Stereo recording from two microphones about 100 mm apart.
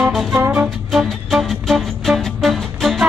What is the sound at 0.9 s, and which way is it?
Music, centre (ahead or behind).